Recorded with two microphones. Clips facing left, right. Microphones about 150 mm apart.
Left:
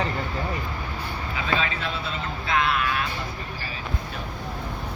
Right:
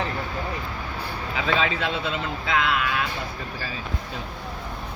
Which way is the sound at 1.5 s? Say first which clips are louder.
Right 3 dB; 90° right.